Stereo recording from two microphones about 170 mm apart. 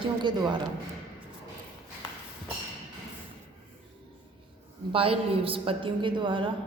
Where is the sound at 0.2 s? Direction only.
25° right (ahead or behind).